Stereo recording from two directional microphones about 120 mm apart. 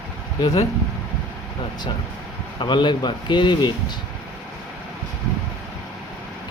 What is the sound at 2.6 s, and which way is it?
A man's voice, 40° left (ahead or behind).